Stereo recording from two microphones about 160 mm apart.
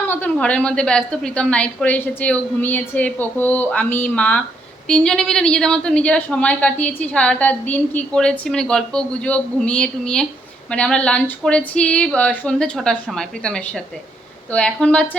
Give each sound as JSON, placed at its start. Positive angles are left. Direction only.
{"t": 0.1, "sound": "a woman's voice", "side_deg": 10}